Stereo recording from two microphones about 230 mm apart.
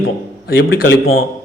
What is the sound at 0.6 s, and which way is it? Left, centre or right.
Speech, left.